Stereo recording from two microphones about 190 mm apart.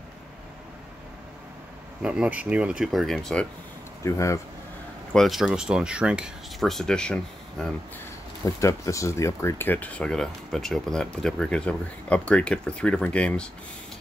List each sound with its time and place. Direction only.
2.0 s speech: 5° right (ahead or behind)
4.0 s speech: 15° left (ahead or behind)
5.1 s speech: centre (ahead or behind)
8.5 s speech: 15° left (ahead or behind)